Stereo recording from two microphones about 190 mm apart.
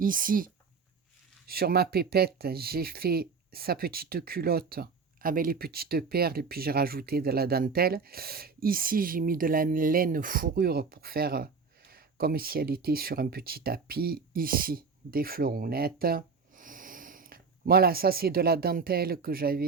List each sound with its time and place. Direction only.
0.0 s speech: 45° right (ahead or behind)